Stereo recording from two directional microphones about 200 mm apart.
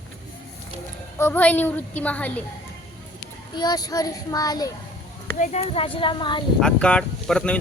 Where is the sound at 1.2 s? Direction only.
10° left (ahead or behind).